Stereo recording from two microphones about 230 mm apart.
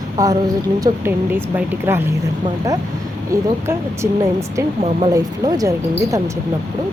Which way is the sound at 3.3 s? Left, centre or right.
Centre.